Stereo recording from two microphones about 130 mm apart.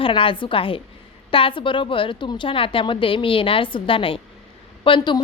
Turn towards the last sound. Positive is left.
turn(degrees=40)  # may be behind; listen again after turning